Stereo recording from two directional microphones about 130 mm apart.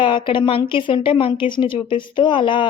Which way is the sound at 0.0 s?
40° left (ahead or behind).